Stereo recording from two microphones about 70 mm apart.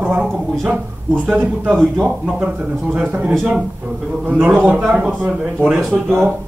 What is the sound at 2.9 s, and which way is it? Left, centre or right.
Speech, centre.